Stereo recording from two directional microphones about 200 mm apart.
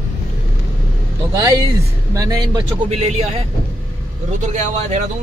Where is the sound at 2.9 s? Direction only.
30° right (ahead or behind).